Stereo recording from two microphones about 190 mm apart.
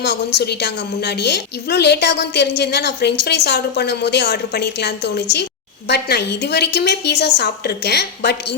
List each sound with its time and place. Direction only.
0.0 s a woman's voice: 60° left (ahead or behind)